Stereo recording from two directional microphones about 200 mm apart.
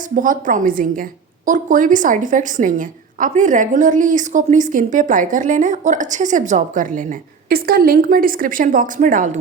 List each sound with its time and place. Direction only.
0.2 s a woman's voice: 40° right (ahead or behind)